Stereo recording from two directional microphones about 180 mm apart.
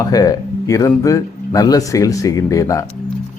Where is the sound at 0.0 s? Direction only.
20° left (ahead or behind).